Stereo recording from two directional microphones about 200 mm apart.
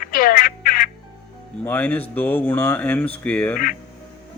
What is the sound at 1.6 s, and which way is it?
Speech, 10° left (ahead or behind).